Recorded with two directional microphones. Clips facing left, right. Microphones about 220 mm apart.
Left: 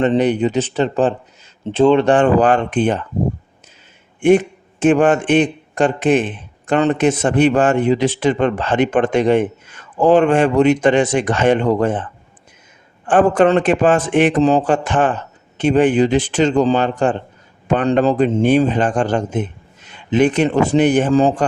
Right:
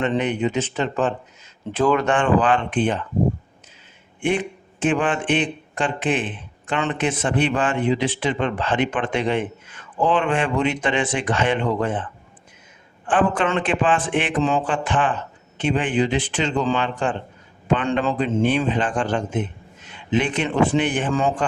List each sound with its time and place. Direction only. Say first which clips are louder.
0.0 s a man's voice: left 6 dB; 35° left (ahead or behind)
4.2 s a man's voice: left 10 dB; 45° left (ahead or behind)
13.1 s a man's voice: left 8 dB; 45° left (ahead or behind)